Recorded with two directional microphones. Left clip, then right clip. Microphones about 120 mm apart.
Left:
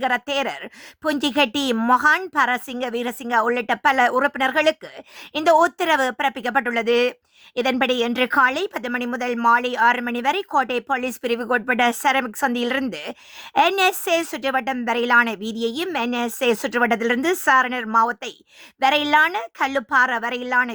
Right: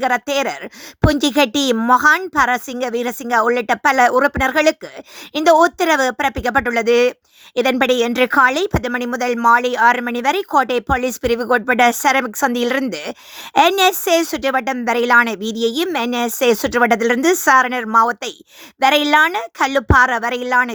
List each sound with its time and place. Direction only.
0.0 s speech: 30° right (ahead or behind)